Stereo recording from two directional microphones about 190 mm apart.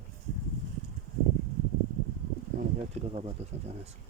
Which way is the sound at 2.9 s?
35° right (ahead or behind).